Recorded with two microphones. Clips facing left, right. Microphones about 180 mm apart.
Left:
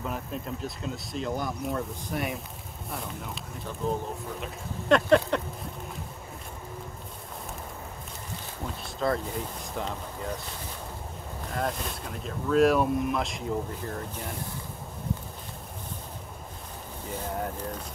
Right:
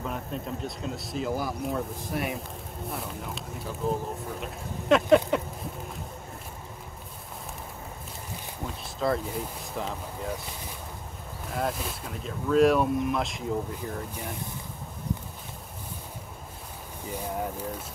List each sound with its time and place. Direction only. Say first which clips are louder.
0.0 s speech: even; centre (ahead or behind)
8.8 s speech: right 1 dB; centre (ahead or behind)
11.5 s speech: right 1 dB; 5° right (ahead or behind)
17.1 s speech: right 1 dB; 10° right (ahead or behind)